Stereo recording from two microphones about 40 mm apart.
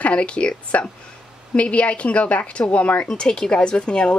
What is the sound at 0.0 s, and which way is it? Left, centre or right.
Speech, left.